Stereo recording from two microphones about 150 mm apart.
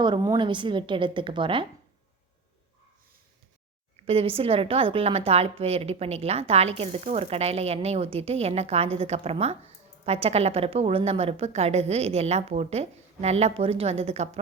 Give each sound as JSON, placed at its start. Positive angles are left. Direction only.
{"t": 0.0, "sound": "a woman's voice", "side_deg": -25}
{"t": 3.9, "sound": "a woman's voice", "side_deg": -40}